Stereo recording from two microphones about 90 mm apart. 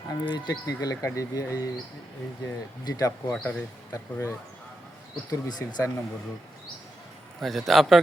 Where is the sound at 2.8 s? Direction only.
40° left (ahead or behind).